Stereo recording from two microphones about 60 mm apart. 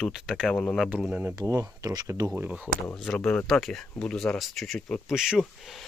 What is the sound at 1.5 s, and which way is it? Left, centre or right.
Speech, right.